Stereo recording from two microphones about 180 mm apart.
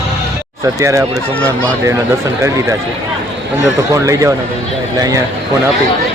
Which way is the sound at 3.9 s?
20° right (ahead or behind).